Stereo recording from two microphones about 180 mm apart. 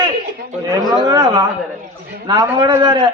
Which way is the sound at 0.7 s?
25° right (ahead or behind).